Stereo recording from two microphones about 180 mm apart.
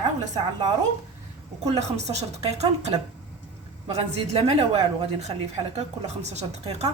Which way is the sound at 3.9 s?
35° right (ahead or behind).